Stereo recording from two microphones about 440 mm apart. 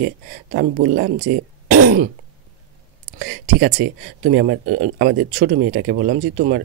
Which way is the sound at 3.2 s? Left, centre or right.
Centre.